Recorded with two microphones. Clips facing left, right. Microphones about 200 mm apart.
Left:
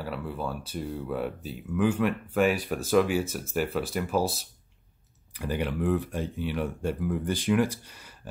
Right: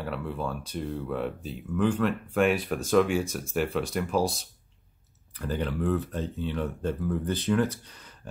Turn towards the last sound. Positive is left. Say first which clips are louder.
# left 1 dB
turn(degrees=10)  # may be behind; listen again after turning